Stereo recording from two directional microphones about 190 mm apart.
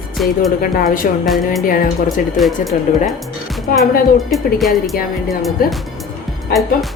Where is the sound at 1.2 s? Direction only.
Centre (ahead or behind).